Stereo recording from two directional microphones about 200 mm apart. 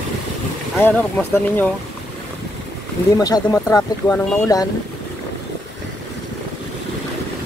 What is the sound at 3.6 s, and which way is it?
Speech, 15° left (ahead or behind).